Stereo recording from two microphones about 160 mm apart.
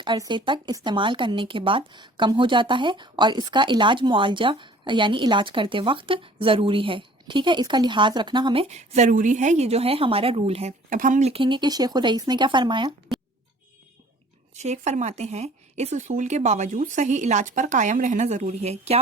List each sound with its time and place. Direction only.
0.0 s speech: 30° right (ahead or behind)
8.6 s speech: 45° right (ahead or behind)
14.5 s speech: 45° right (ahead or behind)